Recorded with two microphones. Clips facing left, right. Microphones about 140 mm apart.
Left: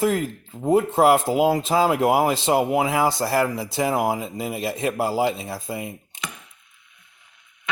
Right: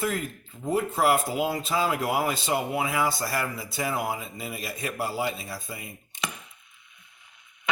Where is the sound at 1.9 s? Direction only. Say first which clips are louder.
Left 7 dB; 90° left.